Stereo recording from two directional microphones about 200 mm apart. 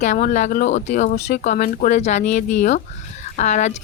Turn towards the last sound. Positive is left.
turn(degrees=35)  # may be behind; listen again after turning